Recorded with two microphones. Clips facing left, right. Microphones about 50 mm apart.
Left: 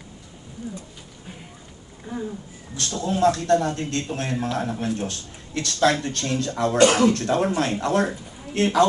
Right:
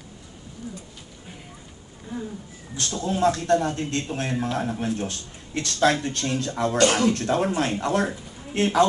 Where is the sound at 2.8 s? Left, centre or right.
Right; by 4.7 s centre.